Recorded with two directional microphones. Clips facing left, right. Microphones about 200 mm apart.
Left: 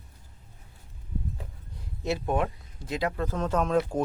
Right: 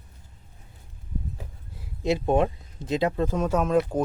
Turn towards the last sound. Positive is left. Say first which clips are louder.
# right 3 dB
turn(degrees=0)  # may be behind; listen again after turning